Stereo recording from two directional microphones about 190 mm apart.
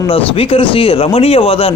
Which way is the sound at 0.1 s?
30° left (ahead or behind).